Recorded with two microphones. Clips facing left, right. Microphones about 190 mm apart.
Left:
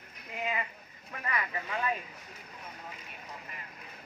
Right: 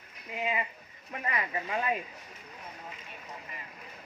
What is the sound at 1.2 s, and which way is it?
Speech, 25° right (ahead or behind).